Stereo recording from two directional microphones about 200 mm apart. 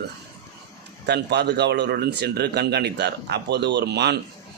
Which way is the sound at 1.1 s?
55° right (ahead or behind).